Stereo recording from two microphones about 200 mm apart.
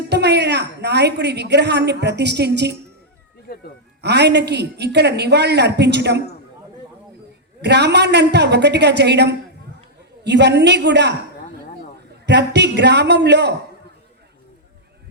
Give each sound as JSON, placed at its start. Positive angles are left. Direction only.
{"t": 0.1, "sound": "a woman's voice", "side_deg": -55}
{"t": 4.0, "sound": "a woman's voice", "side_deg": -60}
{"t": 7.6, "sound": "a woman's voice", "side_deg": -55}
{"t": 12.2, "sound": "a woman's voice", "side_deg": -60}